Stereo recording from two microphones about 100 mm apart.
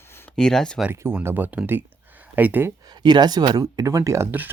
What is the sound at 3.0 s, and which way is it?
Speech, 45° right (ahead or behind).